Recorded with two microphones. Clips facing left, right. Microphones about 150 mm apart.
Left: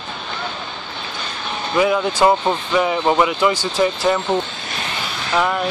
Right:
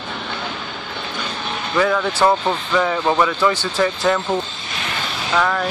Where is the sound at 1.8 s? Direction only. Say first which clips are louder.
Left 1 dB; 15° left (ahead or behind).